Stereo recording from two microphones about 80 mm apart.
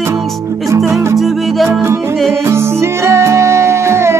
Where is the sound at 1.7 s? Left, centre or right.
Right.